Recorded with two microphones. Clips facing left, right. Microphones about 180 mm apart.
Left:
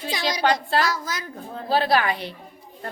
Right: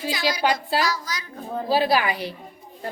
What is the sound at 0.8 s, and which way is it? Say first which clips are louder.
Speech: even; 50° left (ahead or behind).